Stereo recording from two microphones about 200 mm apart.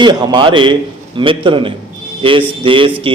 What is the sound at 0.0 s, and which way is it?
A man's voice, 20° right (ahead or behind).